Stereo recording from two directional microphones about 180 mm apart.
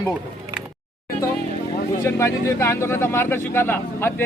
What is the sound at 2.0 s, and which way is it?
A man's voice, 15° left (ahead or behind).